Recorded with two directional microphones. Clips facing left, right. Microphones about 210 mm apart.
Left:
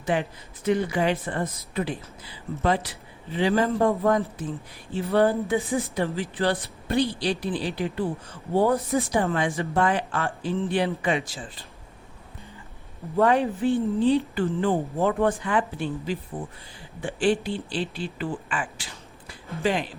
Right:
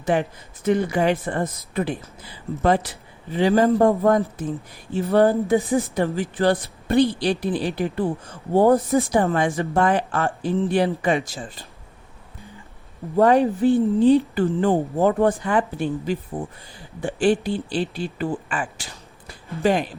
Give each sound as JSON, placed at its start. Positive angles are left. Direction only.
{"t": 0.0, "sound": "speech", "side_deg": -45}
{"t": 13.1, "sound": "speech", "side_deg": -40}
{"t": 19.3, "sound": "a sound", "side_deg": -45}